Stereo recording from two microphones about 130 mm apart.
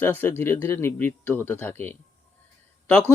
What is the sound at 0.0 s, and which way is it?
Speech, 15° left (ahead or behind).